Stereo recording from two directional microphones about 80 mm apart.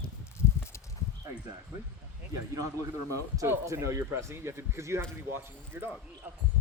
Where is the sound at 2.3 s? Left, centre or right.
Right.